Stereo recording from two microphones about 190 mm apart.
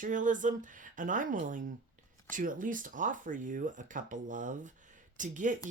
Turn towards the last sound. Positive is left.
turn(degrees=-40)  # may be behind; listen again after turning